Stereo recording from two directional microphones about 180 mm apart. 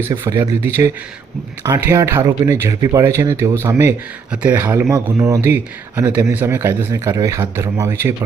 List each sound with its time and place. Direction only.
0.0 s a man's voice: 15° right (ahead or behind)